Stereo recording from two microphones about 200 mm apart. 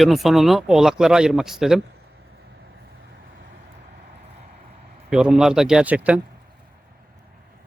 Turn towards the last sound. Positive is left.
turn(degrees=-5)  # may be behind; listen again after turning